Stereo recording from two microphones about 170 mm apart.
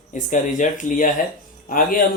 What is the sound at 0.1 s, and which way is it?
Speech, 45° left (ahead or behind).